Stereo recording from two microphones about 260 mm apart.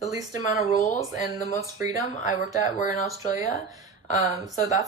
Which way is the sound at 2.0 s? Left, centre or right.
Left.